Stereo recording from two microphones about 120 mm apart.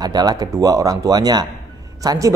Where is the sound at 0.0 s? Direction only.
35° right (ahead or behind).